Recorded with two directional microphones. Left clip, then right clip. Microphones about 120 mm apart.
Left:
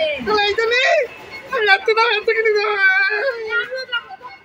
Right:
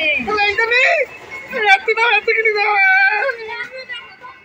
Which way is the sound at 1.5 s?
25° left (ahead or behind).